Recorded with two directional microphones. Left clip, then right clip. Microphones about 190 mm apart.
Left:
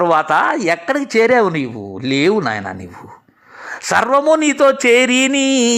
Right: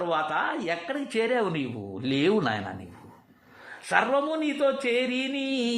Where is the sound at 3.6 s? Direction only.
45° left (ahead or behind).